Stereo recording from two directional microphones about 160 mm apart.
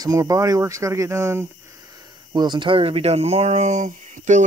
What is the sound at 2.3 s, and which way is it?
Speech, 30° right (ahead or behind).